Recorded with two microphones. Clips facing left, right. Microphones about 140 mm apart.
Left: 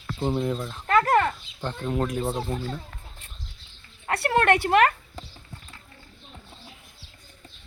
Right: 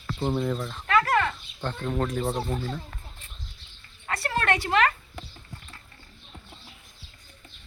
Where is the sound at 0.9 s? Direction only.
40° left (ahead or behind).